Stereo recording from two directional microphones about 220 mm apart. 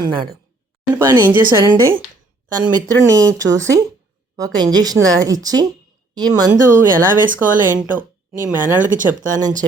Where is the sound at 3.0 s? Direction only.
15° right (ahead or behind).